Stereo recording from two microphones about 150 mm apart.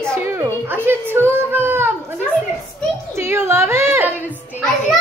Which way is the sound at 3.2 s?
15° right (ahead or behind).